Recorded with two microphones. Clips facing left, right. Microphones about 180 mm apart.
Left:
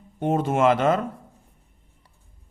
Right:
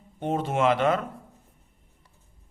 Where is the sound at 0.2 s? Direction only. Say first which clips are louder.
Left 4 dB; 50° left (ahead or behind).